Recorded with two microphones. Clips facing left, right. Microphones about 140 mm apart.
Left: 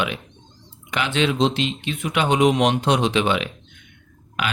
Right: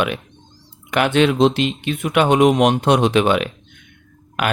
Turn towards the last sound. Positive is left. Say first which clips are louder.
# right 5 dB
turn(degrees=-50)  # may be behind; listen again after turning